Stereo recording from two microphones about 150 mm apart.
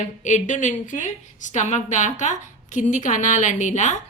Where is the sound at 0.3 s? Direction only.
55° left (ahead or behind).